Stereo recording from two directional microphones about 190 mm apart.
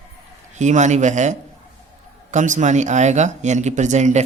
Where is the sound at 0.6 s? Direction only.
40° right (ahead or behind).